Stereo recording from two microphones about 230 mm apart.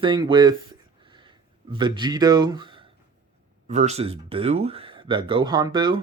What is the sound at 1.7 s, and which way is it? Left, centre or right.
Speech, centre.